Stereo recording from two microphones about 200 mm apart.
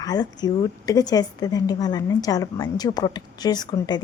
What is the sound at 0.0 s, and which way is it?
A woman's voice, 20° left (ahead or behind).